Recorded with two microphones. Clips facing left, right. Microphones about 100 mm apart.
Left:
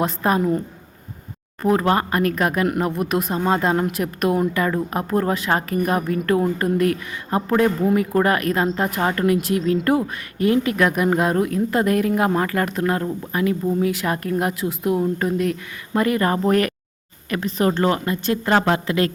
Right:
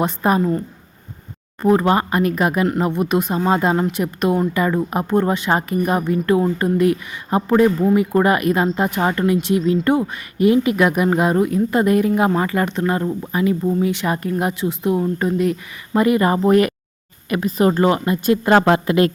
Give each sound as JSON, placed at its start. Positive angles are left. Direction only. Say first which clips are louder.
{"t": 0.0, "sound": "speech", "louder": "right 2 dB", "side_deg": 0}
{"t": 1.6, "sound": "speech", "louder": "right 3 dB", "side_deg": 0}